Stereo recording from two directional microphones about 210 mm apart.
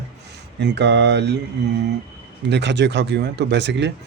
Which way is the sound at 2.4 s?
55° right (ahead or behind).